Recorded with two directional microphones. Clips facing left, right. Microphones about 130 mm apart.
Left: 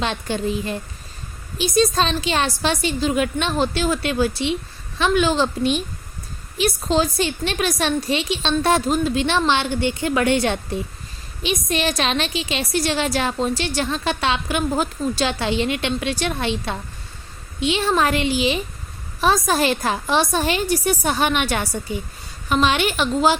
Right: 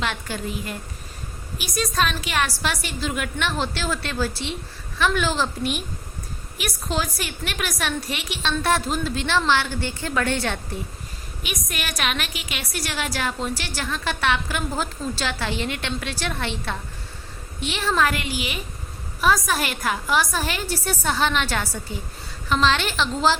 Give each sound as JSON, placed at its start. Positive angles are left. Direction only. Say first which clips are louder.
{"t": 0.0, "sound": "a woman's voice", "louder": "left 5 dB", "side_deg": 25}